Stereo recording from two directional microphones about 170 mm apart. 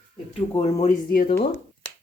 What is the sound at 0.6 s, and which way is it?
Speech, 40° left (ahead or behind).